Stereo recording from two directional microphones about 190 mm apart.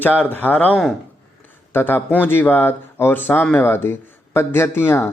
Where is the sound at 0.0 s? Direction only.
10° left (ahead or behind).